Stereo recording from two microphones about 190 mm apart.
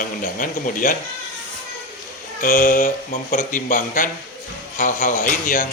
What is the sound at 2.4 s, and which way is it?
A man's voice, 45° left (ahead or behind).